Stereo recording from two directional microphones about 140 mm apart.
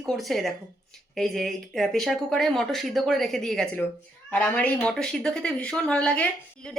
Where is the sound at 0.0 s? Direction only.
Centre (ahead or behind).